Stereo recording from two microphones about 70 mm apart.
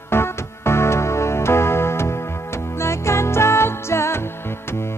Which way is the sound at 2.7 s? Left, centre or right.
Left.